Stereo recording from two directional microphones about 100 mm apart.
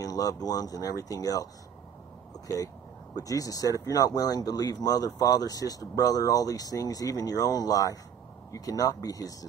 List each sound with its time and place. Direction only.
0.0 s speech: 35° left (ahead or behind)